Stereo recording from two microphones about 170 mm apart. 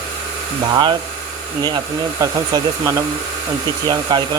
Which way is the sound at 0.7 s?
25° right (ahead or behind).